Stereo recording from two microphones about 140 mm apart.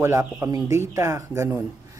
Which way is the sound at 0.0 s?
20° right (ahead or behind).